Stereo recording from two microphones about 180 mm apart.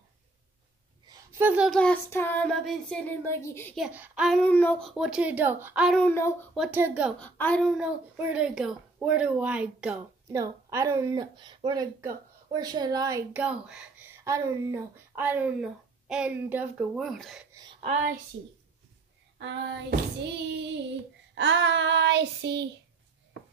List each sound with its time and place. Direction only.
1.4 s speech: 10° right (ahead or behind)
1.7 s child singing: 5° left (ahead or behind)
3.7 s a woman's voice: 5° right (ahead or behind)
4.4 s a woman's voice: 10° left (ahead or behind); by 5.9 s 10° right (ahead or behind)
5.9 s child singing: 10° left (ahead or behind)
6.5 s a woman's voice: 5° right (ahead or behind)
7.2 s a woman's voice: 10° left (ahead or behind); by 9.9 s 5° right (ahead or behind)
10.3 s speech: 15° right (ahead or behind)
13.3 s speech: 5° right (ahead or behind)
14.2 s speech: 15° right (ahead or behind); by 17.5 s centre (ahead or behind)
17.7 s a child's voice: 40° right (ahead or behind)
19.3 s child singing: 80° right
21.4 s child singing: 90° right; by 22.7 s 75° right (ahead or behind)